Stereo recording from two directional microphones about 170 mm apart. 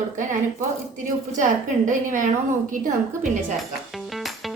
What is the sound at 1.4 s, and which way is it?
Speech, 50° right (ahead or behind).